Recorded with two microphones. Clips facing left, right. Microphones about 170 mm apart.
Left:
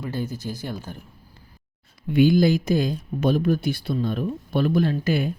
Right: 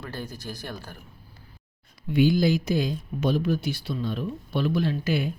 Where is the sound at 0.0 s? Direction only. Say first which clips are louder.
Left 7 dB; 20° left (ahead or behind).